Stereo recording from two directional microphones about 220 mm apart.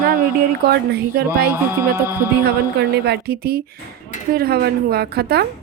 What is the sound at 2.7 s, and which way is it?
A woman's voice, 50° right (ahead or behind).